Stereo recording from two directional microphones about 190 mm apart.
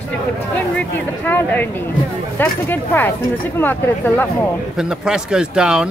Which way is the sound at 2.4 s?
10° left (ahead or behind).